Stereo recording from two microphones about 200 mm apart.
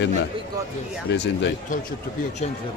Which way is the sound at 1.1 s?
65° left (ahead or behind).